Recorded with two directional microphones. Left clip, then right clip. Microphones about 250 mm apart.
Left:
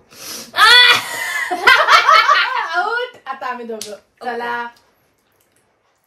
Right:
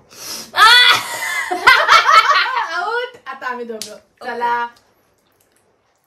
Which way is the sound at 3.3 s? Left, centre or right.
Centre.